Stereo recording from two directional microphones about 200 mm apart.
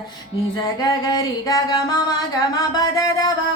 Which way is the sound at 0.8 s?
20° left (ahead or behind).